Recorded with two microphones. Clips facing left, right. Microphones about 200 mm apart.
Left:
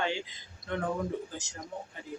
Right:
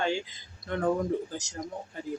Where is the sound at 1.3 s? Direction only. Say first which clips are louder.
Right 4 dB; 40° right (ahead or behind).